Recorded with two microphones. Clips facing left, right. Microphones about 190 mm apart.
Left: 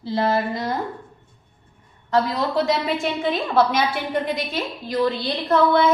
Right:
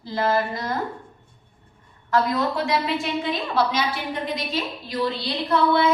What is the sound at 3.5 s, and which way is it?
A woman's voice, 50° left (ahead or behind).